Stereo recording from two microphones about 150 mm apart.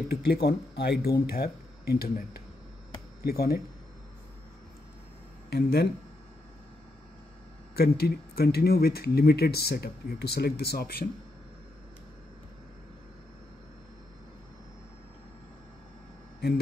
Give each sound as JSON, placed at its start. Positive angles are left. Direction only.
{"t": 0.1, "sound": "speech", "side_deg": 90}
{"t": 5.5, "sound": "speech", "side_deg": 90}
{"t": 7.7, "sound": "speech", "side_deg": 90}